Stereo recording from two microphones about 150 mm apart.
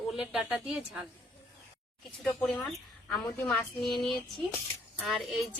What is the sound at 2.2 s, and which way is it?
A woman's voice, 5° left (ahead or behind).